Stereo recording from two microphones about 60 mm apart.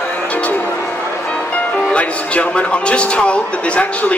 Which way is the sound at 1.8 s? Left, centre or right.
Centre.